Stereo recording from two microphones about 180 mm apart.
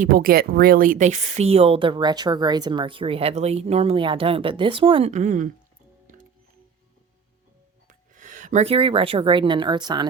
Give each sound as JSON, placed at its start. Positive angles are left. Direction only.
{"t": 0.0, "sound": "speech", "side_deg": -55}
{"t": 7.9, "sound": "speech", "side_deg": -45}